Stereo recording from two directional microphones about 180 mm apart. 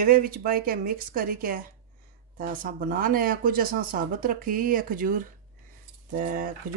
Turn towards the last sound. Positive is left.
turn(degrees=-50)  # may be behind; listen again after turning